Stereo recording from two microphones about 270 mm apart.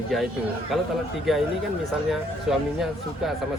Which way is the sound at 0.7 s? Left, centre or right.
Centre.